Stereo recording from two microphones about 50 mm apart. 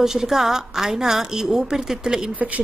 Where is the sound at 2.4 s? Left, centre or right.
Right.